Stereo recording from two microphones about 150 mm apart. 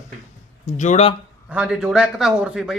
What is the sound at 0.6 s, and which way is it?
Speech, 55° left (ahead or behind).